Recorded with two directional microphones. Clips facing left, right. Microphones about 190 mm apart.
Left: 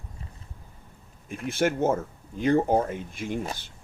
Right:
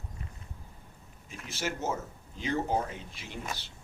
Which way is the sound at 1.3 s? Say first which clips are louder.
Left 11 dB; 55° left (ahead or behind).